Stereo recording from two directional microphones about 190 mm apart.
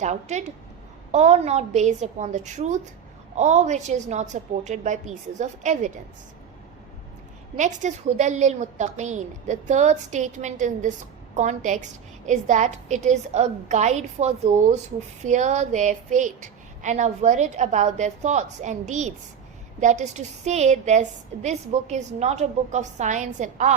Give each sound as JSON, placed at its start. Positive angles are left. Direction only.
{"t": 0.0, "sound": "a woman's voice", "side_deg": -35}
{"t": 7.5, "sound": "a woman's voice", "side_deg": -40}